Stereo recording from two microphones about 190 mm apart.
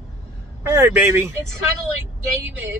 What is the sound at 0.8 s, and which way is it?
Speech, 10° right (ahead or behind).